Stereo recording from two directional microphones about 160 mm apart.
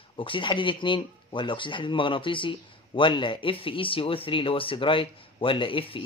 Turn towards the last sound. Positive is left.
turn(degrees=35)  # may be behind; listen again after turning